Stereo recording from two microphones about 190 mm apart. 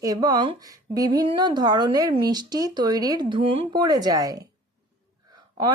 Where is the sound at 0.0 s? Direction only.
20° right (ahead or behind).